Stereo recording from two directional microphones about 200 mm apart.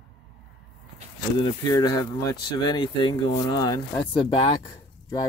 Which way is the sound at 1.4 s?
20° left (ahead or behind).